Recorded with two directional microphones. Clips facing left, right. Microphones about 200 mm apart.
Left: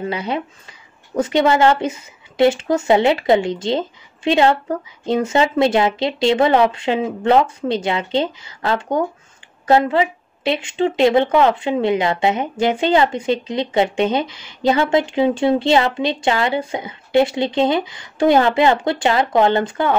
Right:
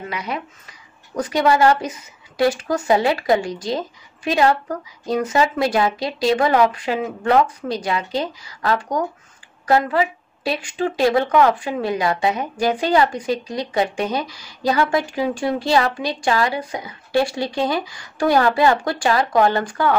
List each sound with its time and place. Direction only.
0.0 s a woman's voice: 30° left (ahead or behind)